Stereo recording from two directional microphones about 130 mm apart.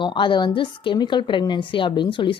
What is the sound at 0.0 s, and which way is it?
A woman's voice, 40° left (ahead or behind).